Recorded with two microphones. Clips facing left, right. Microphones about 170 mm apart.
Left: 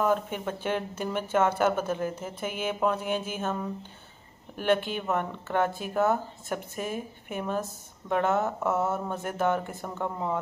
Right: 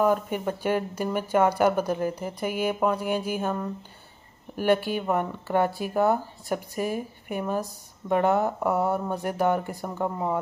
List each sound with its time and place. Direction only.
0.0 s speech: 5° right (ahead or behind)
4.6 s speech: 10° right (ahead or behind)
8.5 s speech: 15° right (ahead or behind)